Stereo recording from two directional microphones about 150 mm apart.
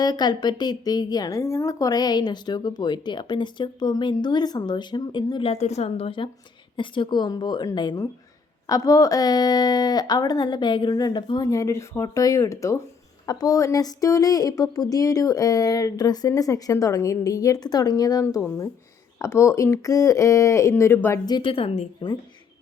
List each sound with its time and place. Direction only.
0.0 s a woman's voice: 25° left (ahead or behind)
21.2 s a woman's voice: 30° left (ahead or behind)